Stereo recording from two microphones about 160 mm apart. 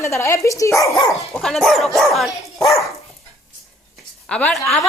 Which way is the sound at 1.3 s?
5° left (ahead or behind).